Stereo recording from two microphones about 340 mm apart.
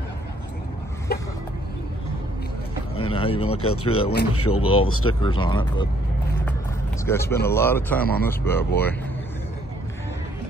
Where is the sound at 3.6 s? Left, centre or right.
Left.